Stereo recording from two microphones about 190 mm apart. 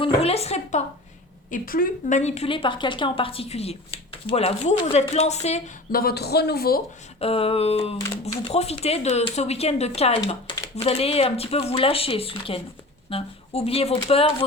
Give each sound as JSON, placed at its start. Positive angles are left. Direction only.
{"t": 0.0, "sound": "a sound", "side_deg": 30}
{"t": 1.5, "sound": "a woman's voice", "side_deg": 45}
{"t": 5.9, "sound": "speech", "side_deg": 50}
{"t": 7.2, "sound": "a woman's voice", "side_deg": 30}